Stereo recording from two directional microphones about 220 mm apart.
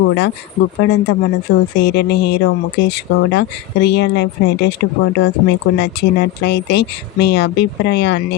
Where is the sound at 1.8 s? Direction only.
50° left (ahead or behind).